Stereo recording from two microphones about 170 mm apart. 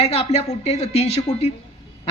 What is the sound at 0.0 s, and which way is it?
Speech, 35° left (ahead or behind).